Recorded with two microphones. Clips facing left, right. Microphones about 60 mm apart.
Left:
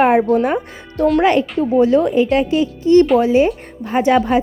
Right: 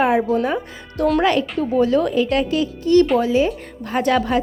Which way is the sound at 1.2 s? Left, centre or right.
Left.